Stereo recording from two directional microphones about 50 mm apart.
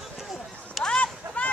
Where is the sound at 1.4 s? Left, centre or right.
Left.